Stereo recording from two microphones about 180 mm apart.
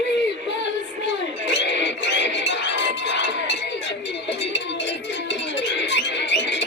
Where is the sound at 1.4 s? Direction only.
75° left (ahead or behind).